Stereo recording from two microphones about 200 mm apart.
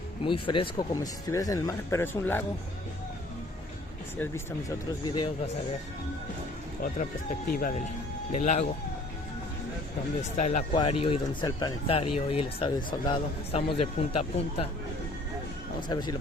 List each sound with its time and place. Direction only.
0.3 s speech: 25° left (ahead or behind)
5.0 s speech: 20° left (ahead or behind)
6.8 s speech: 45° left (ahead or behind)
10.3 s speech: 35° left (ahead or behind)
15.9 s speech: 20° left (ahead or behind)